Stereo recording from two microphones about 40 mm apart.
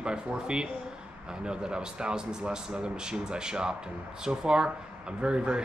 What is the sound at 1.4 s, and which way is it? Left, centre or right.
Speech, right.